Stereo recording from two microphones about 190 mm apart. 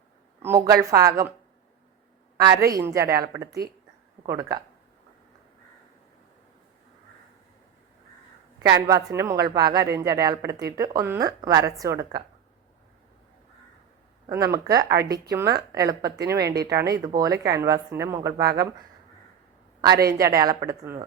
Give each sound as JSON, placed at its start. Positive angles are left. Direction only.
{"t": 0.4, "sound": "a woman's voice", "side_deg": -15}
{"t": 2.4, "sound": "a woman's voice", "side_deg": -20}
{"t": 8.5, "sound": "a woman's voice", "side_deg": -20}
{"t": 14.3, "sound": "a woman's voice", "side_deg": -20}
{"t": 20.1, "sound": "a woman's voice", "side_deg": -15}